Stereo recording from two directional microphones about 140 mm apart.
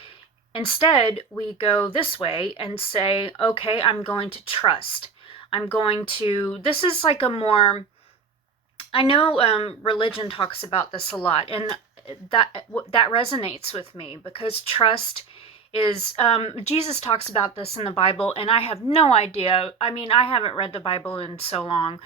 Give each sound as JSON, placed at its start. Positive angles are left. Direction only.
{"t": 0.5, "sound": "speech", "side_deg": 40}